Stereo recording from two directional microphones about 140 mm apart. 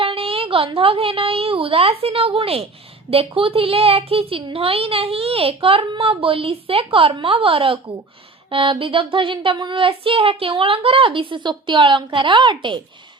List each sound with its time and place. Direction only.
0.0 s a woman's voice: 40° right (ahead or behind)